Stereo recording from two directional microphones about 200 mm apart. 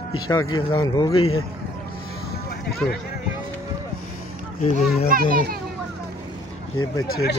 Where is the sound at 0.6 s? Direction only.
25° left (ahead or behind).